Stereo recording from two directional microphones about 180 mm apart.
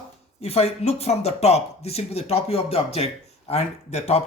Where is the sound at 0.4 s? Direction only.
35° left (ahead or behind).